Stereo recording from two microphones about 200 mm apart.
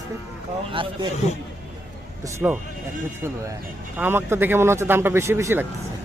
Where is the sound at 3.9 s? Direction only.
10° right (ahead or behind).